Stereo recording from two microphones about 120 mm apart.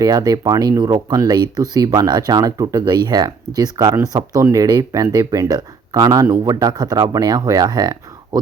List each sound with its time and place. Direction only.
0.0 s speech: 35° right (ahead or behind)